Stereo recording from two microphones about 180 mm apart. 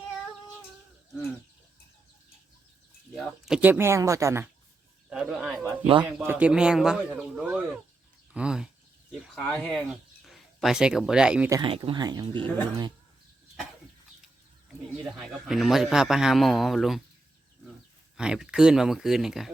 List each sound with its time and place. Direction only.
3.2 s speech: centre (ahead or behind)
5.0 s a sound: 5° right (ahead or behind)
5.8 s speech: 30° right (ahead or behind)
6.1 s speech: 10° right (ahead or behind)
8.3 s a sound: 5° right (ahead or behind)
9.2 s speech: centre (ahead or behind)
11.5 s speech: 25° right (ahead or behind)
15.1 s a man's voice: centre (ahead or behind)
18.2 s a man's voice: 5° right (ahead or behind)